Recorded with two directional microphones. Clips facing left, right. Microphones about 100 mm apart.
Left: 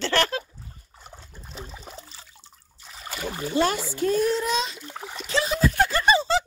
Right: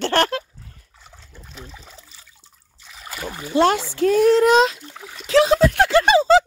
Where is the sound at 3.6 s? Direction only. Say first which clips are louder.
Right 7 dB; 85° right.